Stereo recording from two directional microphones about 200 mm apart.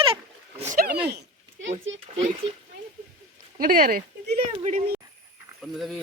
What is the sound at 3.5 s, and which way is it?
Speech, 45° right (ahead or behind).